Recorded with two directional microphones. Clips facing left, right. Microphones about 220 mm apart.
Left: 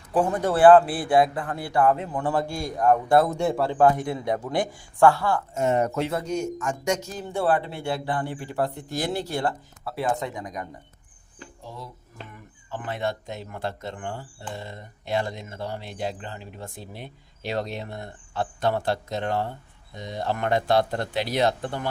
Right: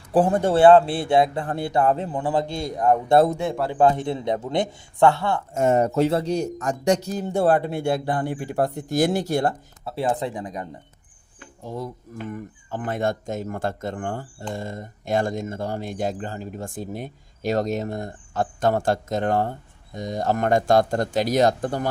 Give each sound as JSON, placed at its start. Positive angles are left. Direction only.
{"t": 0.1, "sound": "speech", "side_deg": -30}
{"t": 3.3, "sound": "speech", "side_deg": 0}
{"t": 3.7, "sound": "speech", "side_deg": -20}
{"t": 5.5, "sound": "speech", "side_deg": -50}
{"t": 5.8, "sound": "speech", "side_deg": -30}
{"t": 9.8, "sound": "speech", "side_deg": -30}
{"t": 11.6, "sound": "speech", "side_deg": -50}